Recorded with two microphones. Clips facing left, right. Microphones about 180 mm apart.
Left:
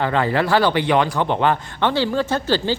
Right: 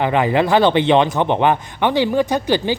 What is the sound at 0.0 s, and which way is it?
A man's voice, 15° right (ahead or behind).